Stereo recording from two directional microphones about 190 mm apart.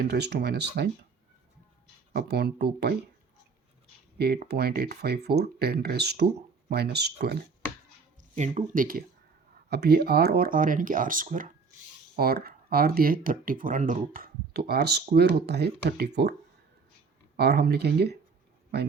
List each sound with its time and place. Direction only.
0.0 s speech: 60° right (ahead or behind)
2.1 s speech: 60° right (ahead or behind)
4.2 s speech: 60° right (ahead or behind)
8.4 s speech: 40° right (ahead or behind)
12.1 s speech: 55° right (ahead or behind)
17.3 s speech: 60° right (ahead or behind)